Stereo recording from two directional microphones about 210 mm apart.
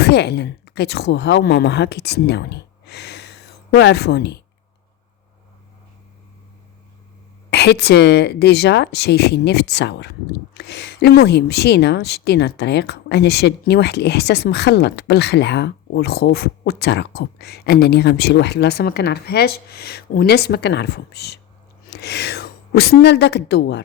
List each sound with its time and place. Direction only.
0.0 s speech: 55° left (ahead or behind)
7.5 s a woman's voice: 50° left (ahead or behind)